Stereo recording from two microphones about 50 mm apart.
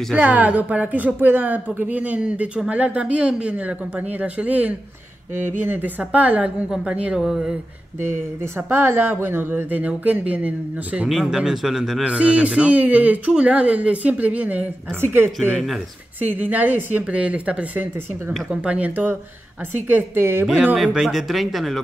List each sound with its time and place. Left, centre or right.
0.1 s speech: right
5.3 s speech: right
7.2 s a man's voice: centre
8.0 s speech: right
11.2 s a man's voice: centre
12.0 s speech: right
15.0 s speech: right
16.2 s speech: right
17.0 s speech: right
19.9 s speech: right
21.0 s speech: centre